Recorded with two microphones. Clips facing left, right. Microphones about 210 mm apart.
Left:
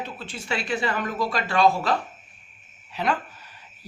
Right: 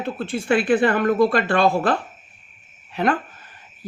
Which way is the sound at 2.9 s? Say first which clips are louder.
Right 5 dB; 50° right (ahead or behind).